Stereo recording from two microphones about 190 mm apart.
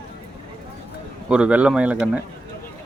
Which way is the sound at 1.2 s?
5° right (ahead or behind).